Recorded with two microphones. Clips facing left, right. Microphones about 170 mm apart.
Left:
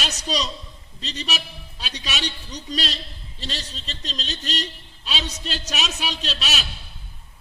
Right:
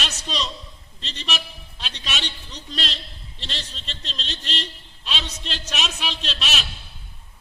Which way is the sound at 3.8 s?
40° left (ahead or behind).